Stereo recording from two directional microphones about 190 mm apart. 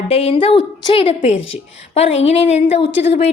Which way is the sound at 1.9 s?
35° left (ahead or behind).